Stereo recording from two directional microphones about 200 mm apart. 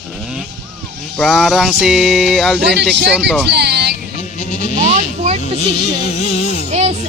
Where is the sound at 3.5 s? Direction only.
55° right (ahead or behind).